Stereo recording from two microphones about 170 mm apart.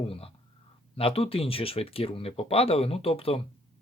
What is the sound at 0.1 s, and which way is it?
Speech, 35° left (ahead or behind).